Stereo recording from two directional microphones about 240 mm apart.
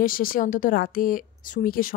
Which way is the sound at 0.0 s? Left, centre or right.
Left.